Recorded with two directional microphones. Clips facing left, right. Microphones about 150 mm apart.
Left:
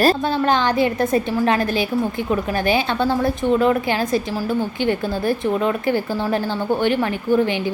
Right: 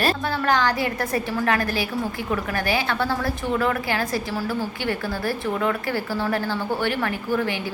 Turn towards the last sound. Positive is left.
turn(degrees=20)  # may be behind; listen again after turning